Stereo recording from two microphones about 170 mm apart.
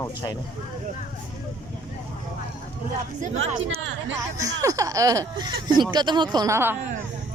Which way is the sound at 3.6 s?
90° right.